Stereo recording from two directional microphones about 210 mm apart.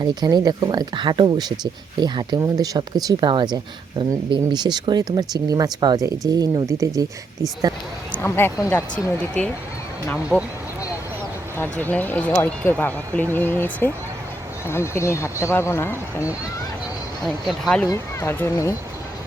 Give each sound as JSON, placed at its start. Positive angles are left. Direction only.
{"t": 0.0, "sound": "speech", "side_deg": -20}
{"t": 8.1, "sound": "speech", "side_deg": 10}
{"t": 10.3, "sound": "speech", "side_deg": 5}
{"t": 11.5, "sound": "speech", "side_deg": 10}
{"t": 17.2, "sound": "speech", "side_deg": 0}
{"t": 17.8, "sound": "speech", "side_deg": 15}